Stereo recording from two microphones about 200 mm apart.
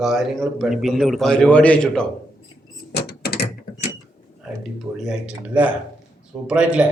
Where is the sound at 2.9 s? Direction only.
55° left (ahead or behind).